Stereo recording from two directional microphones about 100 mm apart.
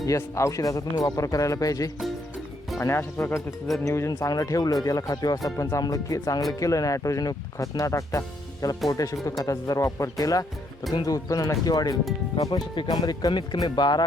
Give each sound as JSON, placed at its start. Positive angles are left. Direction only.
{"t": 0.2, "sound": "speech", "side_deg": 30}